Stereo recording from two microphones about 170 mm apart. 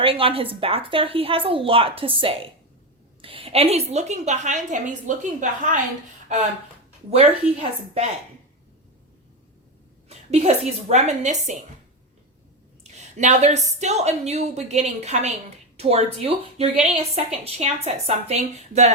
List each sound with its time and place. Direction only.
0.0 s a woman's voice: 35° right (ahead or behind)
7.1 s a woman's voice: 35° right (ahead or behind)
10.1 s a sound: 40° right (ahead or behind)
10.8 s a woman's voice: 45° right (ahead or behind)
12.8 s a woman's voice: 40° right (ahead or behind)